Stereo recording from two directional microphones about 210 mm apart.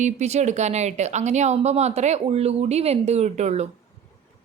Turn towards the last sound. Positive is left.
turn(degrees=-35)  # may be behind; listen again after turning